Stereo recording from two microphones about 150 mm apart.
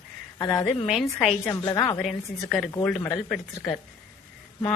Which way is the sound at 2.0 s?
Centre (ahead or behind).